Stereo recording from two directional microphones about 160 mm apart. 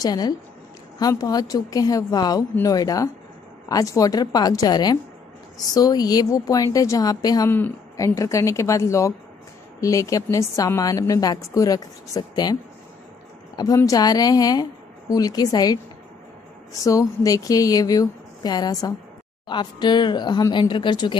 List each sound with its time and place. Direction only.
0.0 s a woman's voice: 25° left (ahead or behind)
13.6 s a woman's voice: 20° left (ahead or behind)
16.8 s a woman's voice: 20° left (ahead or behind)